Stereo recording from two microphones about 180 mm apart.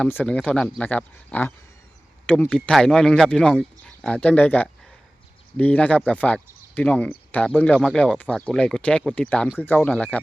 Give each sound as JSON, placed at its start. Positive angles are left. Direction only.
{"t": 0.0, "sound": "speech", "side_deg": 10}